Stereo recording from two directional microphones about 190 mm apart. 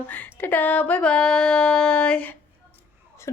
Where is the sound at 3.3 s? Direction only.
15° left (ahead or behind).